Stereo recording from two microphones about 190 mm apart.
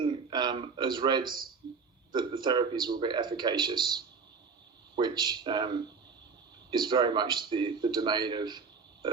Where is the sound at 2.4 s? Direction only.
25° right (ahead or behind).